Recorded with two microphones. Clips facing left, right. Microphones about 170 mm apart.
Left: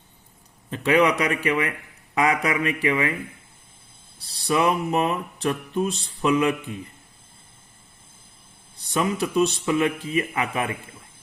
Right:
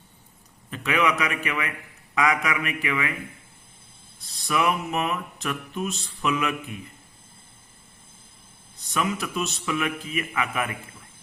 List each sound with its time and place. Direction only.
0.7 s mantra: 30° left (ahead or behind)
4.2 s mantra: 30° left (ahead or behind)
8.9 s mantra: 30° left (ahead or behind)